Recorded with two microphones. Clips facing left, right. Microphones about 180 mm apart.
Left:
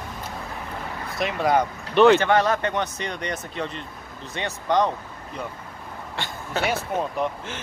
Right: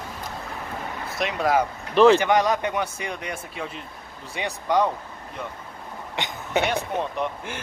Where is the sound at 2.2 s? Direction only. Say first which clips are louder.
Even; 15° right (ahead or behind).